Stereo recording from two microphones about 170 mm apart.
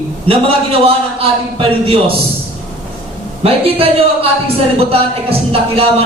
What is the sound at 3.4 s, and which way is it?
A man's voice, 35° right (ahead or behind).